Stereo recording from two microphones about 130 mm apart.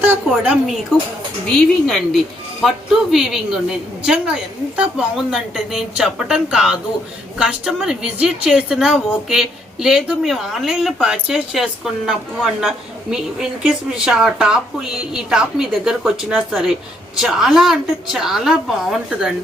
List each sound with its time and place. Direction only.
0.0 s a woman's voice: 15° right (ahead or behind)
0.9 s a woman's voice: centre (ahead or behind)